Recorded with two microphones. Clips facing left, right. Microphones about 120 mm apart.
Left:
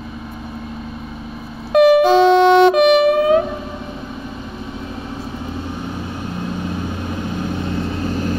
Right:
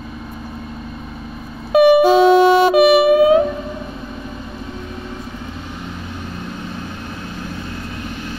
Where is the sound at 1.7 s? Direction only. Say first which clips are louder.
Even; 5° right (ahead or behind).